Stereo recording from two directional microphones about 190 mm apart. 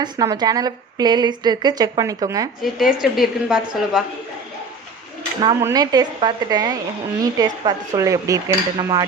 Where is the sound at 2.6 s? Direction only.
Centre (ahead or behind).